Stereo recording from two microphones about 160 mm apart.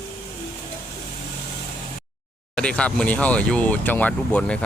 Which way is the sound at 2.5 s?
5° left (ahead or behind).